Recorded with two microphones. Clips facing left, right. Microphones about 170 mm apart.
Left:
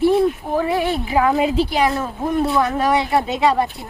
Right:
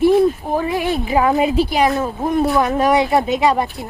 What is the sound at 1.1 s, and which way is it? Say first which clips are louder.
Speech: right 2 dB; 25° right (ahead or behind).